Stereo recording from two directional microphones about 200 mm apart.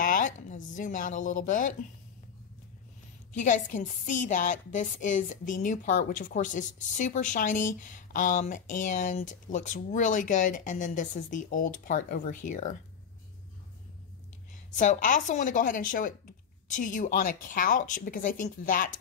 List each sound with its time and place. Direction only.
0.0 s a woman's voice: 40° left (ahead or behind)
3.3 s a woman's voice: 40° left (ahead or behind)
14.8 s a woman's voice: 40° left (ahead or behind)